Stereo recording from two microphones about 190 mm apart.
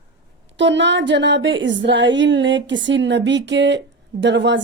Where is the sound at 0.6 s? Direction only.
70° right (ahead or behind).